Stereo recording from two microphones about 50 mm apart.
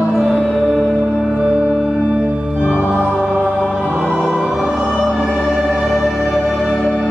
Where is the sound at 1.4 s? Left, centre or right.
Right.